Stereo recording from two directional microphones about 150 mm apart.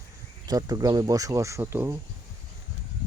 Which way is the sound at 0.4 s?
25° right (ahead or behind).